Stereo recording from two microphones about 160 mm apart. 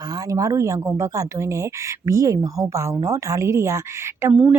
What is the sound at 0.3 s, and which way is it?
A woman's voice, 20° right (ahead or behind).